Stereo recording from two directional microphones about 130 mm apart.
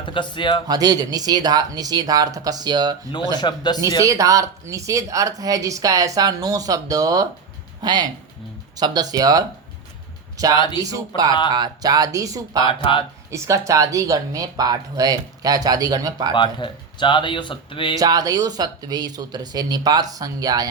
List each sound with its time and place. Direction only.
0.0 s speech: 40° left (ahead or behind)
0.7 s speech: 30° right (ahead or behind)
3.3 s speech: 35° left (ahead or behind)
4.0 s speech: 25° right (ahead or behind)
10.5 s speech: 35° left (ahead or behind)
11.5 s speech: 30° right (ahead or behind)
12.6 s speech: 40° left (ahead or behind)
13.3 s speech: 25° right (ahead or behind)
16.3 s speech: 40° left (ahead or behind)
17.9 s speech: 30° right (ahead or behind)